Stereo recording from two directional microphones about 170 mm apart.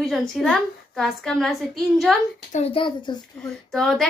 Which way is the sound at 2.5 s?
40° left (ahead or behind).